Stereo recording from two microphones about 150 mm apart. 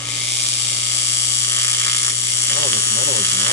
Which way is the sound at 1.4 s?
15° left (ahead or behind).